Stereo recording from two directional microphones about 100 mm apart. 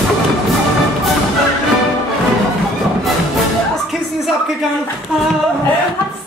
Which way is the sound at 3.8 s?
Centre (ahead or behind).